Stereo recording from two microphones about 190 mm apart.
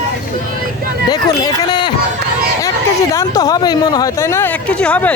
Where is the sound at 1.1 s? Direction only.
20° left (ahead or behind).